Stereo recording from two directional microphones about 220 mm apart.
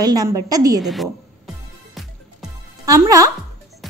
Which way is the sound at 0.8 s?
Centre (ahead or behind).